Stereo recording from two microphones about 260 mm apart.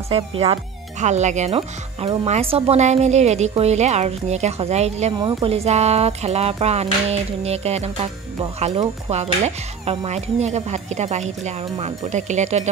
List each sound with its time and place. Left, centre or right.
0.1 s speech: right